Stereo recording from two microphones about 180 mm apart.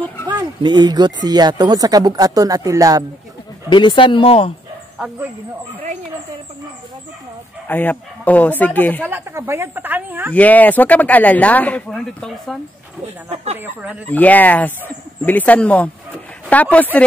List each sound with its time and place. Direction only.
0.3 s speech: 25° right (ahead or behind)
3.7 s speech: 25° left (ahead or behind)
7.6 s speech: 10° left (ahead or behind)
9.0 s speech: 10° right (ahead or behind)
10.3 s speech: 10° left (ahead or behind)
13.6 s speech: 10° right (ahead or behind)
14.0 s speech: 10° left (ahead or behind)